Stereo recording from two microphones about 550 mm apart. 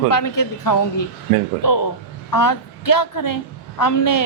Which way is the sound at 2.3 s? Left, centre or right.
Left.